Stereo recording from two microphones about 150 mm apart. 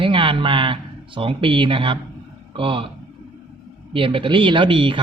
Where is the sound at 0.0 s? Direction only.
35° right (ahead or behind).